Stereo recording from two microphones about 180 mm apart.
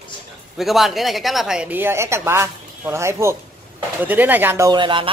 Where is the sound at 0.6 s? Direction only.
Centre (ahead or behind).